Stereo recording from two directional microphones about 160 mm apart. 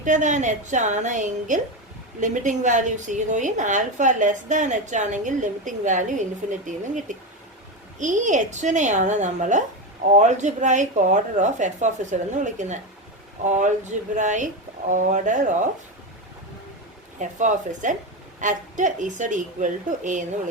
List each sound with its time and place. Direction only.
0.0 s a woman's voice: 50° right (ahead or behind)
17.2 s a woman's voice: 50° right (ahead or behind)